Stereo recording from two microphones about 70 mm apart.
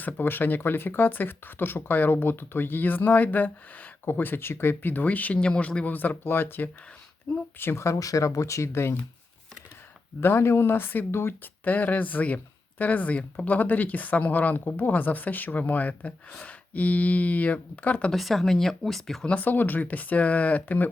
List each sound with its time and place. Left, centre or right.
0.0 s speech: left
7.3 s speech: centre
7.6 s speech: left
10.2 s speech: left
11.6 s speech: left
18.1 s speech: centre
19.2 s speech: left